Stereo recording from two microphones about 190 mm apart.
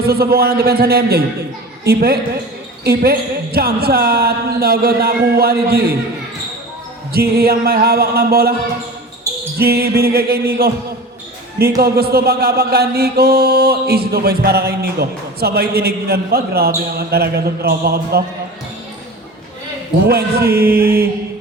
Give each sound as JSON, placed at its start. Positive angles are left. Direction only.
{"t": 0.0, "sound": "music", "side_deg": -55}
{"t": 2.8, "sound": "a woman's voice", "side_deg": -55}
{"t": 7.1, "sound": "music", "side_deg": -55}
{"t": 9.6, "sound": "music", "side_deg": -55}
{"t": 11.8, "sound": "music", "side_deg": -55}
{"t": 20.1, "sound": "music", "side_deg": -55}